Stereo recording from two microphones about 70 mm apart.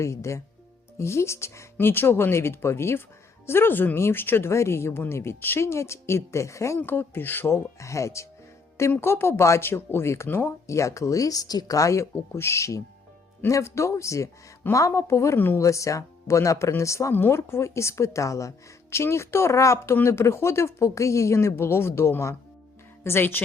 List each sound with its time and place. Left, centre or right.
0.0 s a woman's voice: left
6.7 s a woman's voice: left
8.9 s a woman's voice: left
10.7 s speech: left
17.1 s a woman's voice: left